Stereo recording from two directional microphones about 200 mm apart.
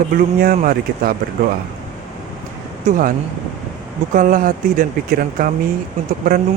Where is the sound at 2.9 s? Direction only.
45° right (ahead or behind).